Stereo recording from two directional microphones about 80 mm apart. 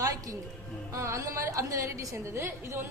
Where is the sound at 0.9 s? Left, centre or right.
Right.